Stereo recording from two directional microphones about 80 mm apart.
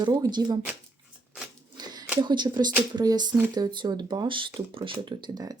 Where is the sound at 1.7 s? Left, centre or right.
Right.